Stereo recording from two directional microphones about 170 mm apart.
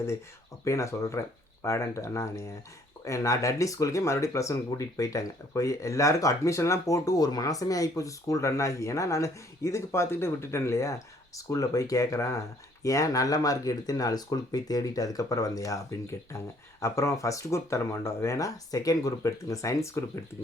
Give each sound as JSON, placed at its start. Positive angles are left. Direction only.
{"t": 0.6, "sound": "speech", "side_deg": 20}